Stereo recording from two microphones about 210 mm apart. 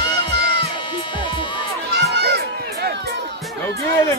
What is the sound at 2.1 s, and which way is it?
Crowd, 50° right (ahead or behind).